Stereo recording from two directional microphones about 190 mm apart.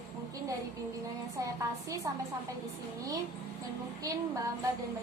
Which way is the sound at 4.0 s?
15° right (ahead or behind).